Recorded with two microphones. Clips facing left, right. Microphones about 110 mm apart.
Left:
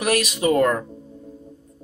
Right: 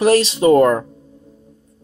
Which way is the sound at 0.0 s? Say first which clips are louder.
Right 7 dB; 30° right (ahead or behind).